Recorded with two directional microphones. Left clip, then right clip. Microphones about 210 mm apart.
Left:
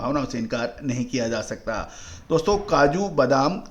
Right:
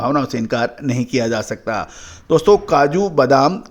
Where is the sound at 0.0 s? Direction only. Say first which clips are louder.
Right 7 dB; 35° right (ahead or behind).